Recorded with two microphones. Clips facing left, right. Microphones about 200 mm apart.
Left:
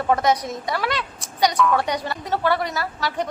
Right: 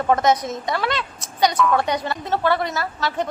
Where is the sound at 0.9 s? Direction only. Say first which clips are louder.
Right 1 dB; 15° left (ahead or behind).